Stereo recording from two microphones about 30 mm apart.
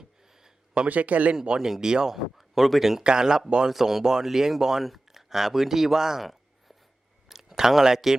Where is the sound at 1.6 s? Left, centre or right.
Centre.